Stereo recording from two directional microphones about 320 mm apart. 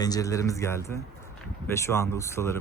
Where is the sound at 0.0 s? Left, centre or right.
Centre.